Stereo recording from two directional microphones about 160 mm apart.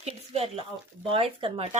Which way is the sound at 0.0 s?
40° right (ahead or behind).